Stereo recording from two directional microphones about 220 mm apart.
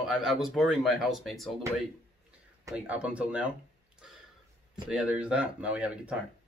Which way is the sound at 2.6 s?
5° right (ahead or behind).